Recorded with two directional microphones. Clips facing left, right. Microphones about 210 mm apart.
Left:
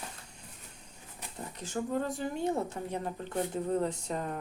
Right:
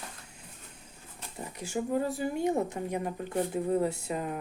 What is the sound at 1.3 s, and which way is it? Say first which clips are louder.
Speech: right 2 dB; 10° right (ahead or behind).